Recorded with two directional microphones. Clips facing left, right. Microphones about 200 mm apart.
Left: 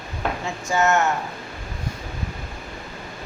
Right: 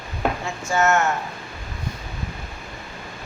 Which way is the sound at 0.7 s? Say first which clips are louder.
Even; 15° left (ahead or behind).